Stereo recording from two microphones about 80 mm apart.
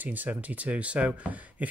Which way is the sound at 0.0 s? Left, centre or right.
Right.